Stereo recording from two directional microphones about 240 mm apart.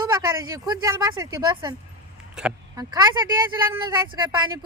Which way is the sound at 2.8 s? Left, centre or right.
Centre.